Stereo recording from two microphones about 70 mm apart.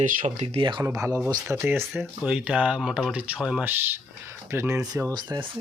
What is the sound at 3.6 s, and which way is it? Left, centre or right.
Speech, right.